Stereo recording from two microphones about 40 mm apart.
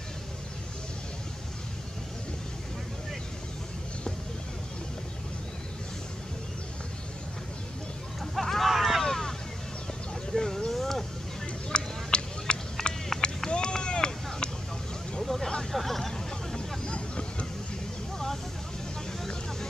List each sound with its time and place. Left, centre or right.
8.2 s vehicle: centre
9.0 s vehicle: centre
10.3 s a sound: centre
11.7 s a sound: left
12.9 s vehicle: left
15.2 s vehicle: centre
15.7 s hubbub: centre
16.5 s vehicle: left
18.1 s vehicle: centre